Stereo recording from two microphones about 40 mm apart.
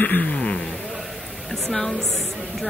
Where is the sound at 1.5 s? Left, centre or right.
Centre.